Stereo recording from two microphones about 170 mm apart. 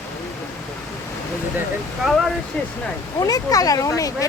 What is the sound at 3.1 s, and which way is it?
Speech, 20° left (ahead or behind).